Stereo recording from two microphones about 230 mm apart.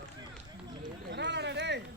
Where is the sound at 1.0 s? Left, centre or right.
Right.